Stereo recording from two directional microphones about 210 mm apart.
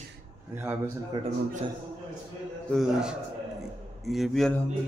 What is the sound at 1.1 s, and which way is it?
Speech, 20° right (ahead or behind).